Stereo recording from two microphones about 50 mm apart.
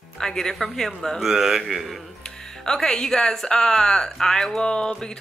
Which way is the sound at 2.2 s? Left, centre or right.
Centre.